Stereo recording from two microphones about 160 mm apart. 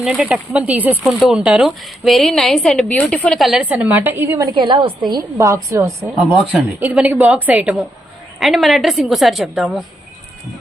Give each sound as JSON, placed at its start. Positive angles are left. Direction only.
{"t": 0.0, "sound": "a woman's voice", "side_deg": -5}
{"t": 4.5, "sound": "a woman's voice", "side_deg": -30}
{"t": 6.1, "sound": "a woman's voice", "side_deg": -10}